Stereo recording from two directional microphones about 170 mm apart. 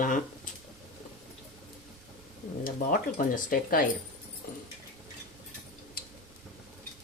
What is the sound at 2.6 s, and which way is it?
Speech, 55° left (ahead or behind).